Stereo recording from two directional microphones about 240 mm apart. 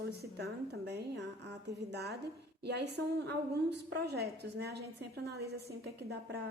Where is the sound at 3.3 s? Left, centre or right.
Right.